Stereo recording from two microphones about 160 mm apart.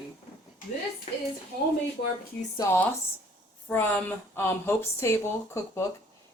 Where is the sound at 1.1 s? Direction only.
40° left (ahead or behind).